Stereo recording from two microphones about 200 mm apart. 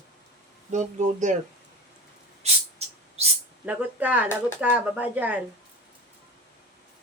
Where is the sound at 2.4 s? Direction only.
30° right (ahead or behind).